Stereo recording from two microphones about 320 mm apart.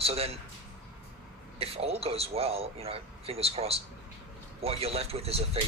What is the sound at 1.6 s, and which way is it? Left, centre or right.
Speech, centre.